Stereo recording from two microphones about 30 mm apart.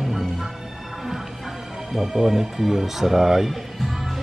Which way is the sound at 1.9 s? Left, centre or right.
Centre.